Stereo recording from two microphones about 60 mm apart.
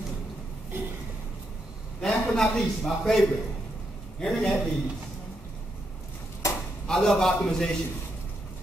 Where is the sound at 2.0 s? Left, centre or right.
Centre.